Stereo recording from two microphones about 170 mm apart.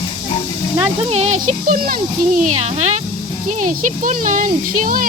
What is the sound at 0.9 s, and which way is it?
Speech, 40° right (ahead or behind).